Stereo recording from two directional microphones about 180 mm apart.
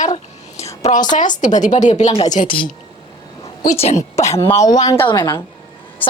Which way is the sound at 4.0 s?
15° left (ahead or behind).